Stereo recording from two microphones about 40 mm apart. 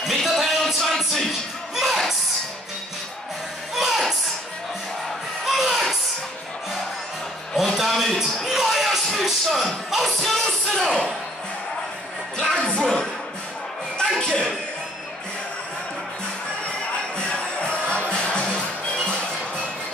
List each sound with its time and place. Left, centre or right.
0.0 s music: centre
3.7 s music: centre
5.5 s a sound: centre
7.6 s a sound: centre
9.8 s music: centre
10.2 s music: centre
12.5 s music: left
13.9 s a sound: centre
17.3 s music: left